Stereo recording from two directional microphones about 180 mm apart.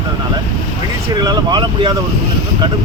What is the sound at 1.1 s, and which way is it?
Speech, 25° right (ahead or behind).